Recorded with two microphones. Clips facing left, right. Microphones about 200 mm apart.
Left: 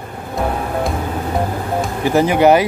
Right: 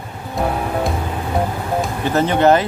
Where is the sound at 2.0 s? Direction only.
10° left (ahead or behind).